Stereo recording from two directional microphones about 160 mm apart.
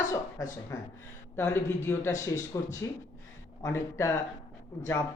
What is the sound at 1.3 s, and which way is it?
Speech, 15° left (ahead or behind).